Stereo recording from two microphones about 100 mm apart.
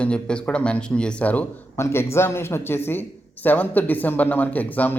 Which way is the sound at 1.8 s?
25° left (ahead or behind).